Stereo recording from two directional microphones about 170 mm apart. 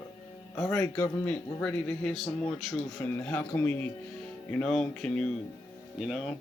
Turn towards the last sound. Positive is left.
turn(degrees=0)  # may be behind; listen again after turning